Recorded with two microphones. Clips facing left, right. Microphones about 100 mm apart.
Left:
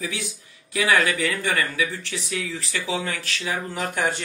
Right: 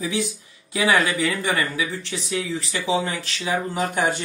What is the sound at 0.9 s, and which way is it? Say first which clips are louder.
Speech: right 1 dB; 30° right (ahead or behind).